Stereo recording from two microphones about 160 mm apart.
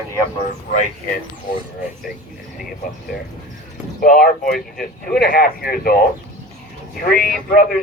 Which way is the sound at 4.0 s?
60° left (ahead or behind).